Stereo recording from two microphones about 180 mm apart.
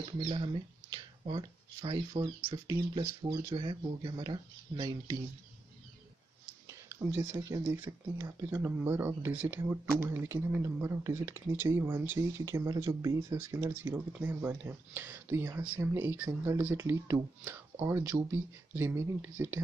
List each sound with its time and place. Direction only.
0.2 s speech: 30° right (ahead or behind)
7.3 s speech: 15° right (ahead or behind)